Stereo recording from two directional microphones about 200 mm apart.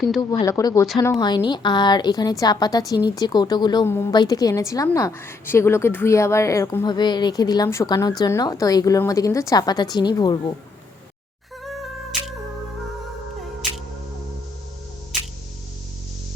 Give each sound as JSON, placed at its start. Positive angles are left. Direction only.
{"t": 0.2, "sound": "a woman's voice", "side_deg": 20}
{"t": 12.1, "sound": "music", "side_deg": 0}
{"t": 15.1, "sound": "music", "side_deg": 0}